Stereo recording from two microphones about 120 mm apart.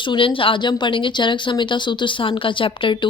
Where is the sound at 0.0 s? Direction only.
45° left (ahead or behind).